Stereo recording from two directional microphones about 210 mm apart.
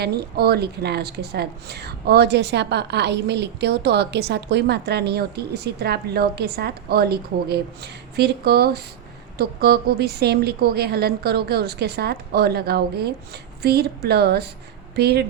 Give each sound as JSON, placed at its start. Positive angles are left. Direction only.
{"t": 0.0, "sound": "a woman's voice", "side_deg": -50}